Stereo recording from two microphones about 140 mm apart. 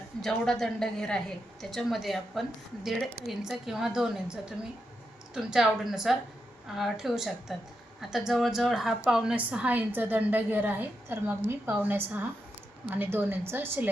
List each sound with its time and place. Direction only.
0.2 s a woman's voice: 5° left (ahead or behind); by 13.9 s 15° right (ahead or behind)